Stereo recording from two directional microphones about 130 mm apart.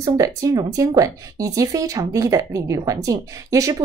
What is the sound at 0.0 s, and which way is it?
Speech, 25° right (ahead or behind).